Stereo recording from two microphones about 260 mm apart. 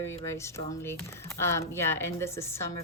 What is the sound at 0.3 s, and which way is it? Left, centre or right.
Speech, centre.